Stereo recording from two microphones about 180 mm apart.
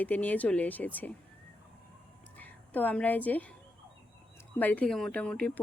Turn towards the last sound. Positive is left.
turn(degrees=5)  # may be behind; listen again after turning